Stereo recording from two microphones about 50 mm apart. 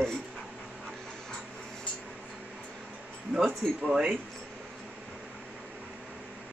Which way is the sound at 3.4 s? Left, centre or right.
Centre.